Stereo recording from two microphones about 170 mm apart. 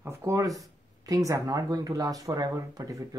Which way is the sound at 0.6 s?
20° right (ahead or behind).